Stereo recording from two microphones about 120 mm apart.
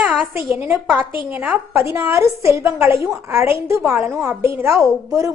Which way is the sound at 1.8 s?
20° right (ahead or behind).